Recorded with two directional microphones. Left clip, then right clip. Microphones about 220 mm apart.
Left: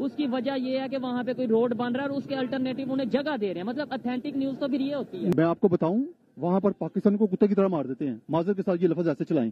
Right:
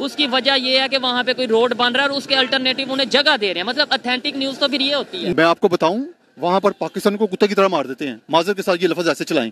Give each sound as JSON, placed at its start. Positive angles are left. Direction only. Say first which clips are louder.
{"t": 0.0, "sound": "speech", "louder": "right 11 dB", "side_deg": -10}